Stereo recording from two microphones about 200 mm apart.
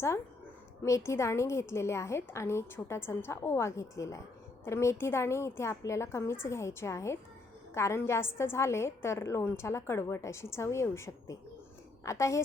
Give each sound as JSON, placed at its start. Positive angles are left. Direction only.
{"t": 0.8, "sound": "a woman's voice", "side_deg": 15}